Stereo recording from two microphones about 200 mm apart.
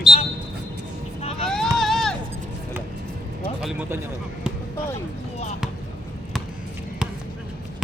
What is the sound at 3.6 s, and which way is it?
Speech, 10° right (ahead or behind).